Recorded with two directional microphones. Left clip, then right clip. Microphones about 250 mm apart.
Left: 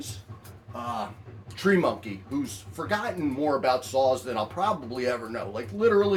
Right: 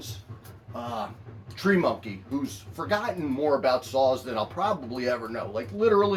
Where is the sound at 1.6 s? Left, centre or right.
Centre.